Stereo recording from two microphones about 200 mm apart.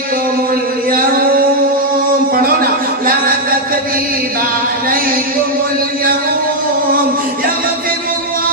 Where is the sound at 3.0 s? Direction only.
45° right (ahead or behind).